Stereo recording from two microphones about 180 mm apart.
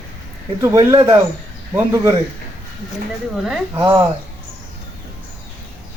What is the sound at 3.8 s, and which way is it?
Speech, 25° right (ahead or behind).